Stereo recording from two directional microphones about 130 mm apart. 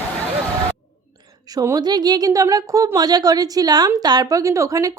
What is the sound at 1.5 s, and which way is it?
Speech, 25° right (ahead or behind).